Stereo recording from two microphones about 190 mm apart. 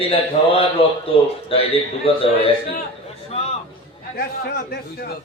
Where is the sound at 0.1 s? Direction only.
30° left (ahead or behind).